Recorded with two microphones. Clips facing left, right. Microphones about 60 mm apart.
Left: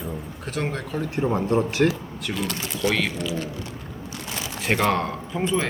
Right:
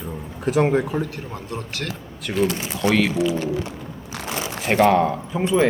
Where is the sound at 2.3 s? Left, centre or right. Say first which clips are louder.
Right 7 dB; centre.